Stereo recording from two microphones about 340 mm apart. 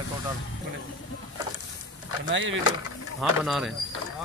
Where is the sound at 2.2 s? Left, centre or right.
Right.